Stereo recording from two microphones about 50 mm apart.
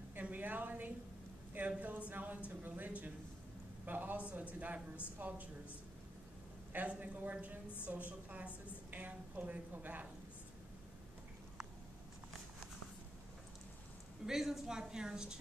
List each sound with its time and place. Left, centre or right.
0.1 s a sound: right
1.8 s a woman's voice: right
6.7 s a woman's voice: right
14.2 s a woman's voice: centre